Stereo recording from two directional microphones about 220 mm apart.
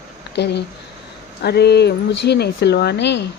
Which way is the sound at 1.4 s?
50° left (ahead or behind).